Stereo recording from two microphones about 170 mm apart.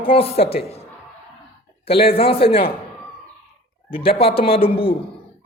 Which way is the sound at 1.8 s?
35° left (ahead or behind).